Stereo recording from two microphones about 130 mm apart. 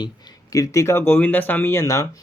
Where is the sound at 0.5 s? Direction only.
25° left (ahead or behind).